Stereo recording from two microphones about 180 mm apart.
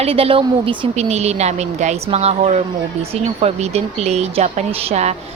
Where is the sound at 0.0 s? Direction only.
30° right (ahead or behind).